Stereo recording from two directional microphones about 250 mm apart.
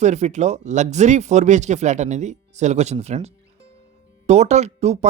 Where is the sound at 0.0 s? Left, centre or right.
Right.